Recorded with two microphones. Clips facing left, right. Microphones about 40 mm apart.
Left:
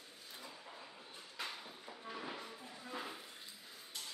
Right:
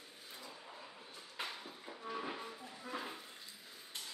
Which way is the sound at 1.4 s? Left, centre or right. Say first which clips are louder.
Right 1 dB; centre.